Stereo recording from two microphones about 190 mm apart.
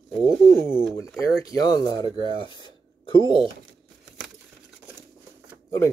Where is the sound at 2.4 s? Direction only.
25° left (ahead or behind).